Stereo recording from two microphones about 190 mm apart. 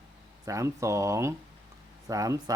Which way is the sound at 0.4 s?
15° right (ahead or behind).